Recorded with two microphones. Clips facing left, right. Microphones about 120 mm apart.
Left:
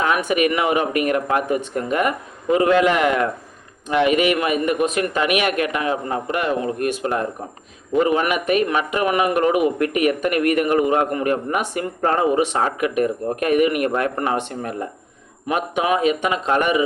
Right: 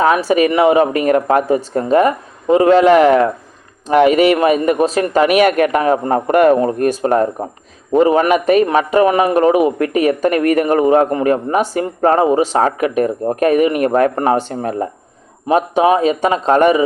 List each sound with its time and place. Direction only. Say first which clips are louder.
0.0 s a man's voice: right 6 dB; 35° right (ahead or behind)